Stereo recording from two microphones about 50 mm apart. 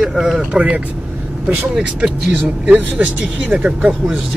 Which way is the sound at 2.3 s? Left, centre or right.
Right.